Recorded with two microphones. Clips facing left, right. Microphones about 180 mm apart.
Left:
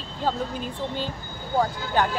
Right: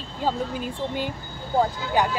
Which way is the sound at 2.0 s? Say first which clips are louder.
Right 1 dB; 10° right (ahead or behind).